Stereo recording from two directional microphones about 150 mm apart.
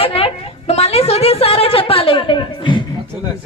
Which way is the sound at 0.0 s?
40° left (ahead or behind).